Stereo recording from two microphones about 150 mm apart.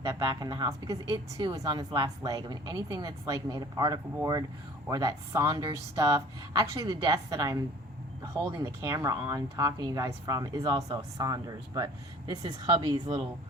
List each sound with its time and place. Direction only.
0.0 s a woman's voice: 25° right (ahead or behind)